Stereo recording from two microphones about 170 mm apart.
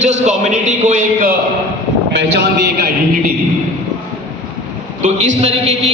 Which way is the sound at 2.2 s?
70° right (ahead or behind).